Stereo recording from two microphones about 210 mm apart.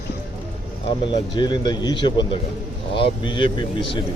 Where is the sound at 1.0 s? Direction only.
25° left (ahead or behind).